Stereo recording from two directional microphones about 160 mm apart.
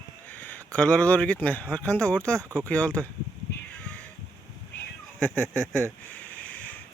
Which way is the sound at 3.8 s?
5° left (ahead or behind).